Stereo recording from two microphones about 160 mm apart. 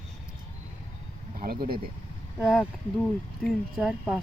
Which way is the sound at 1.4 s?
70° right (ahead or behind).